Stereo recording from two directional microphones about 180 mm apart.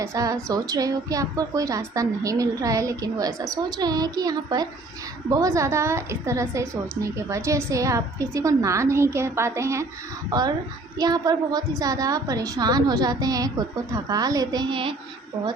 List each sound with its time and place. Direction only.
0.0 s a woman's voice: 20° right (ahead or behind)